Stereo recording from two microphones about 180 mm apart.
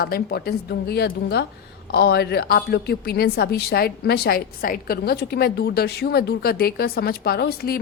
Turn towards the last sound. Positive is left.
turn(degrees=60)  # may be behind; listen again after turning